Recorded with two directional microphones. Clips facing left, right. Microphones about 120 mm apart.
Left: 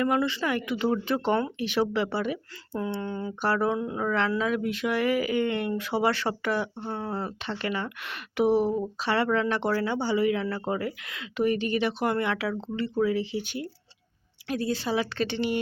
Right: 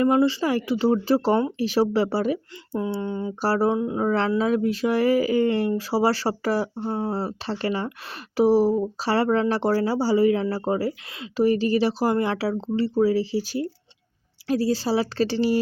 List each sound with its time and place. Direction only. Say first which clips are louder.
0.0 s speech: right 6 dB; 30° right (ahead or behind)
3.0 s speech: right 4 dB; 20° right (ahead or behind)
3.4 s speech: right 4 dB; 35° right (ahead or behind)